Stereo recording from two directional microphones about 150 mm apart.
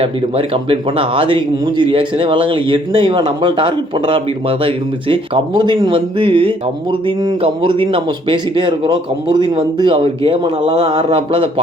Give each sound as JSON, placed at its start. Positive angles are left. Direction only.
{"t": 0.0, "sound": "speech", "side_deg": -40}